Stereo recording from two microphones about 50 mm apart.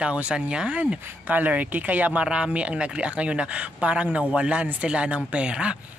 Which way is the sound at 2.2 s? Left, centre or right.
Right.